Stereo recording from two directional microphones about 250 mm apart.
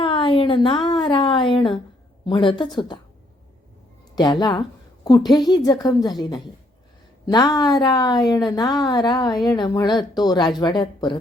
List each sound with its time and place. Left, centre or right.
0.0 s a woman's voice: left
4.1 s a woman's voice: centre